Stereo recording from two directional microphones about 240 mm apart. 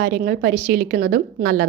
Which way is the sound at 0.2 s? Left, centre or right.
Right.